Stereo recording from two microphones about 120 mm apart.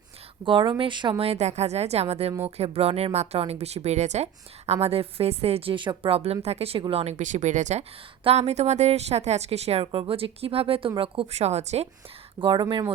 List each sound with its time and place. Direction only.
0.4 s speech: 40° right (ahead or behind)
1.2 s speech: 60° right (ahead or behind); by 7.9 s 80° right
8.2 s speech: 60° right (ahead or behind)
9.8 s speech: 45° right (ahead or behind); by 11.9 s 60° right (ahead or behind)
12.4 s speech: 40° right (ahead or behind)